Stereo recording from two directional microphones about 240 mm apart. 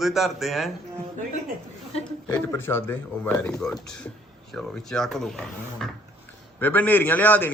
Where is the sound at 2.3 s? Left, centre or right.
Centre.